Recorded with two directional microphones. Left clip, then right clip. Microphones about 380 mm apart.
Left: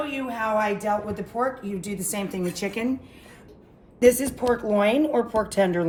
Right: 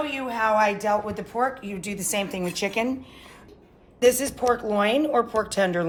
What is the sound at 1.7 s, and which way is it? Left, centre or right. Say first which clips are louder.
Speech: right 3 dB; centre.